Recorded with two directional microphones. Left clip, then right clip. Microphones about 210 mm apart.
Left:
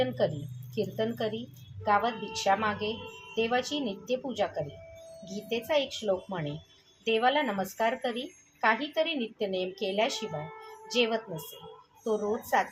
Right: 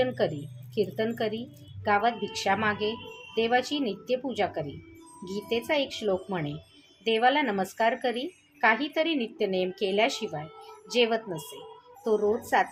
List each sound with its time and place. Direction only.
0.0 s a woman's voice: 40° right (ahead or behind)